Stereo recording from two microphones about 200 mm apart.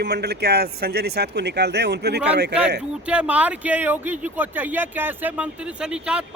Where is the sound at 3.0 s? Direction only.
5° right (ahead or behind).